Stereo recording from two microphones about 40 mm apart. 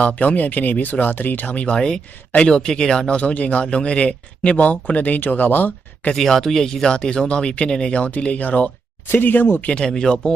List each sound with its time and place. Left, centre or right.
0.0 s speech: left
1.6 s speech: left
3.1 s speech: left
6.1 s speech: centre
8.0 s speech: left
9.1 s speech: left
9.6 s speech: left